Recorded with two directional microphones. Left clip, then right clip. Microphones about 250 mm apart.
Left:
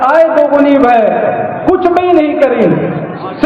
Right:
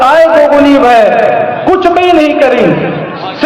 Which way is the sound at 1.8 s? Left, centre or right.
Right.